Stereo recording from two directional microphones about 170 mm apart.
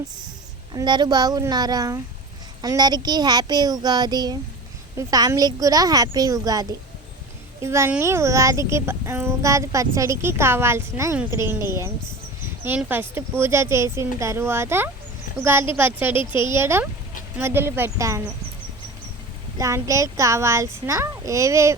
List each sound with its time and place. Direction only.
0.7 s a woman's voice: 25° right (ahead or behind)
19.5 s a child's voice: 20° right (ahead or behind)